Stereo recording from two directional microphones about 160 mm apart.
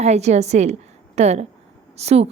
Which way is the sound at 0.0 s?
45° right (ahead or behind).